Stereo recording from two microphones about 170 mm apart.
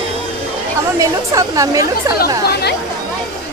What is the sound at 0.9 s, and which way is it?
Speech, 20° right (ahead or behind).